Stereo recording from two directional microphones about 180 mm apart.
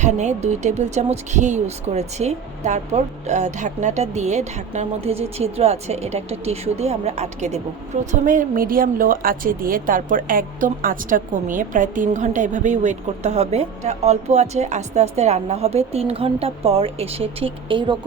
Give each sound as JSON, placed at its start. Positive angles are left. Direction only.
{"t": 0.0, "sound": "a woman's voice", "side_deg": -40}